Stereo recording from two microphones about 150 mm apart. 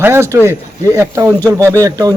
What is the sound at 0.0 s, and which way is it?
A man's voice, 15° right (ahead or behind).